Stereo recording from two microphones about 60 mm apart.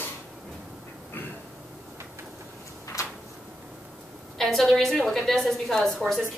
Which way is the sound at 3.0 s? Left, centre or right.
Left.